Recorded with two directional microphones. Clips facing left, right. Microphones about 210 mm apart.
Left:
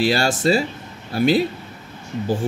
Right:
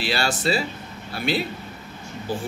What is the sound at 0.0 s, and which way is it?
A man's voice, 45° left (ahead or behind).